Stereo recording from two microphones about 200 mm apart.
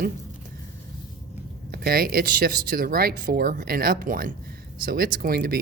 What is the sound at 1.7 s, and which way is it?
Speech, 50° right (ahead or behind).